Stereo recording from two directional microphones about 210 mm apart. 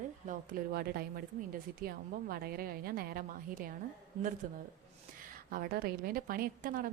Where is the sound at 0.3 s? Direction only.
45° right (ahead or behind).